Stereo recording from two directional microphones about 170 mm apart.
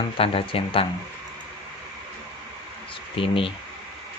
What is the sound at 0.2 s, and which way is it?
Speech, 35° left (ahead or behind).